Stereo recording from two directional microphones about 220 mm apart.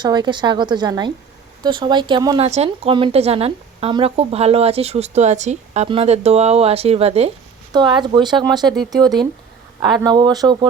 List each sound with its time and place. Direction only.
0.0 s speech: 20° right (ahead or behind)